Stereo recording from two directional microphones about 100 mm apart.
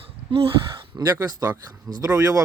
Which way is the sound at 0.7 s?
50° right (ahead or behind).